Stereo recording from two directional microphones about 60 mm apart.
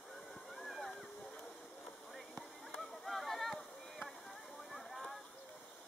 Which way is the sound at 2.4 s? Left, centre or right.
Centre.